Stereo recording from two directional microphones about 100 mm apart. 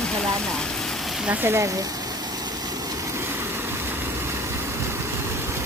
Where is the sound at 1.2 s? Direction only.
25° right (ahead or behind).